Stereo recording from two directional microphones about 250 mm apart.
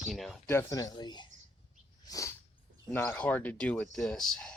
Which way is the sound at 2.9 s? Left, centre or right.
Centre.